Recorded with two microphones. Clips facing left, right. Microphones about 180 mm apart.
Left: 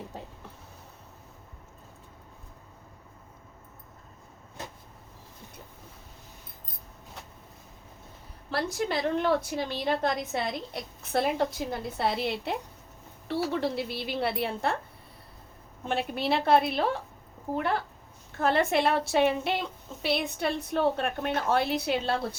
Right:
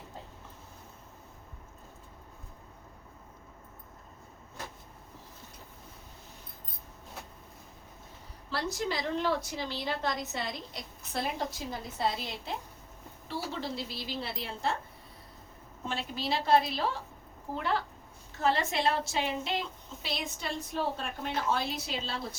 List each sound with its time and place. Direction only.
8.4 s a woman's voice: 60° left (ahead or behind)
15.9 s a woman's voice: 60° left (ahead or behind)